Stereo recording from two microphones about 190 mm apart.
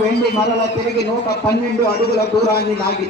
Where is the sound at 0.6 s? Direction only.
60° left (ahead or behind).